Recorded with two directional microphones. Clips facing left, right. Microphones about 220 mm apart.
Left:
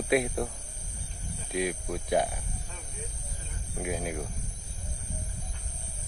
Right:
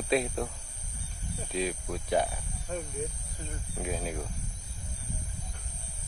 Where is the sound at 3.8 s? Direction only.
10° left (ahead or behind).